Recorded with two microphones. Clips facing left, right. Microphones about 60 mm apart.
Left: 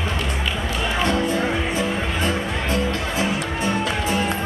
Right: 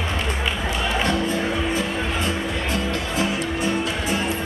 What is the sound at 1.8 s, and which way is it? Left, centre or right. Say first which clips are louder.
Music: left 1 dB; left.